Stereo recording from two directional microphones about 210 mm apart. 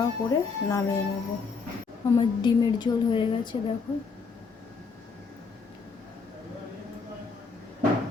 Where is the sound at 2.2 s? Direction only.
20° left (ahead or behind).